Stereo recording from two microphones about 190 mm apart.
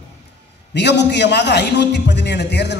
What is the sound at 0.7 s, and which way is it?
A man's voice, 65° left (ahead or behind).